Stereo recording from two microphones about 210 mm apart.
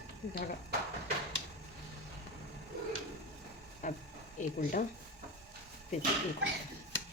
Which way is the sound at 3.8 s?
35° left (ahead or behind).